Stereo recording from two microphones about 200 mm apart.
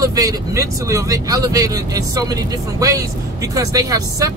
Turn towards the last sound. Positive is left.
turn(degrees=-15)  # may be behind; listen again after turning